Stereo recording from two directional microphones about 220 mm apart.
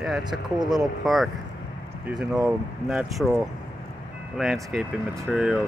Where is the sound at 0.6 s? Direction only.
20° right (ahead or behind).